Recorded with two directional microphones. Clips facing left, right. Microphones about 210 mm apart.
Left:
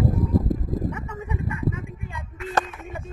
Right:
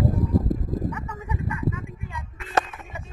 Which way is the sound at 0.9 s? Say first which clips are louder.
Left 1 dB; 25° left (ahead or behind).